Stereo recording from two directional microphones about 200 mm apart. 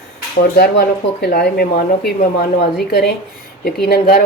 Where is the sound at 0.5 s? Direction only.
55° left (ahead or behind).